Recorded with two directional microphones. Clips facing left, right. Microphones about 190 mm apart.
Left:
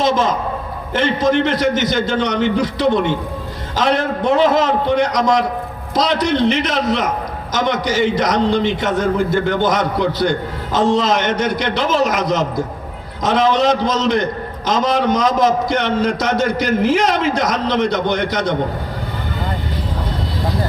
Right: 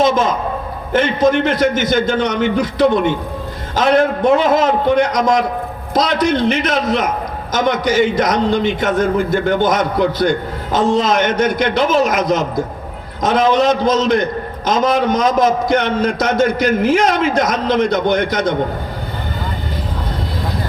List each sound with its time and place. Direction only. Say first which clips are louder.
0.0 s a man's voice: right 2 dB; 50° right (ahead or behind)